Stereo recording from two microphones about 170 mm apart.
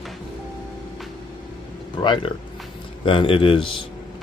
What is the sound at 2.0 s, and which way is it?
A man's voice, 30° left (ahead or behind).